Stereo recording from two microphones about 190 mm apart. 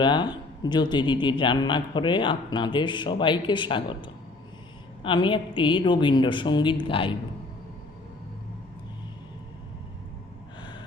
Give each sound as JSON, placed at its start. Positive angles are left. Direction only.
{"t": 0.0, "sound": "a man's voice", "side_deg": 25}